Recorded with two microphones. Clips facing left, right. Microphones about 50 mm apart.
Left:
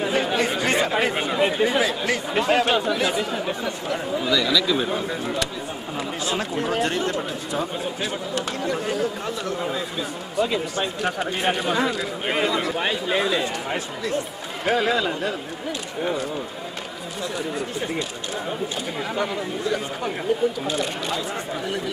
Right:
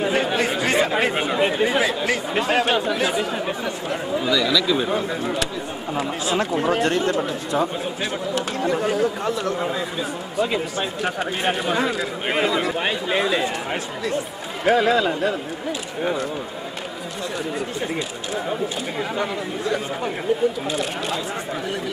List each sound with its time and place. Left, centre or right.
0.4 s chatter: centre
1.6 s a man's voice: centre
18.5 s speech: centre